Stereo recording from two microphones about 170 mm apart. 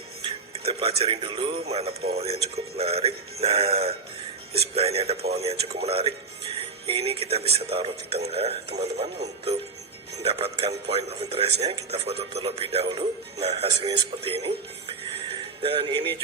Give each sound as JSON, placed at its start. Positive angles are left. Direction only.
{"t": 0.3, "sound": "speech", "side_deg": -35}
{"t": 5.1, "sound": "speech", "side_deg": -70}
{"t": 5.4, "sound": "speech", "side_deg": -35}
{"t": 13.8, "sound": "speech", "side_deg": -25}